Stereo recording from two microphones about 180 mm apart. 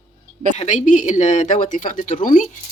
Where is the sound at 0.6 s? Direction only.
40° left (ahead or behind).